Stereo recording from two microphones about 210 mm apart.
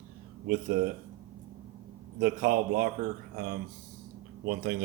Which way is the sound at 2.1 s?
50° right (ahead or behind).